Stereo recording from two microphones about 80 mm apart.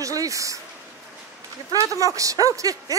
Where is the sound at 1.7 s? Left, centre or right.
Right.